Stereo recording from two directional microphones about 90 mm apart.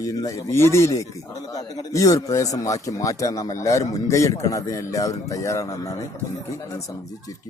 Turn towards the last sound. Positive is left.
turn(degrees=35)  # may be behind; listen again after turning